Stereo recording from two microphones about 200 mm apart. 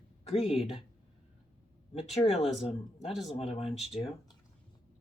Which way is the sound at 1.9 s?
35° left (ahead or behind).